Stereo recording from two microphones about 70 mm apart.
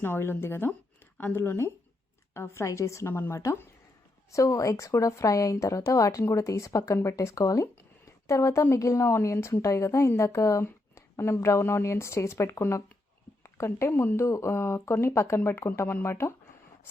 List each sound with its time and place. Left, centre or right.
0.0 s a woman's voice: left
10.9 s a sound: left
11.4 s speech: left